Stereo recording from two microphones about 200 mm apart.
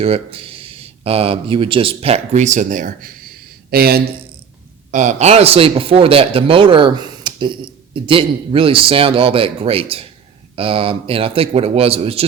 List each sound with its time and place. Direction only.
0.0 s speech: 30° right (ahead or behind); by 4.0 s 50° right (ahead or behind)
4.9 s speech: 35° right (ahead or behind)